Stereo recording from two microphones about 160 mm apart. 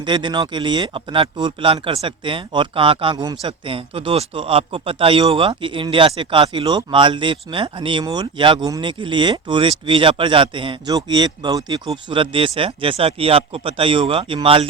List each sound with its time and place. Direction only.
0.0 s speech: 30° right (ahead or behind)